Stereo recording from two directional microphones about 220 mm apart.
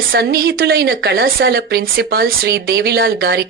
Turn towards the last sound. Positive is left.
turn(degrees=-45)  # may be behind; listen again after turning